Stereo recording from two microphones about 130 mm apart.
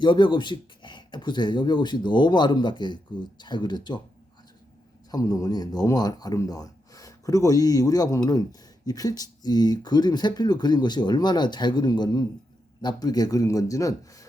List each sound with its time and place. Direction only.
0.0 s speech: 35° left (ahead or behind)
5.1 s speech: 30° left (ahead or behind)